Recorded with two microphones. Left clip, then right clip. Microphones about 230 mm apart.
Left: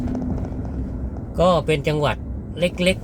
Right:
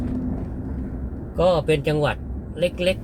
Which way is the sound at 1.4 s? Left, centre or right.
Centre.